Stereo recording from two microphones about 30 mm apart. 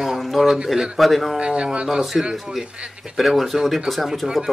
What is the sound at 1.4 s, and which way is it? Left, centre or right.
Speech, right.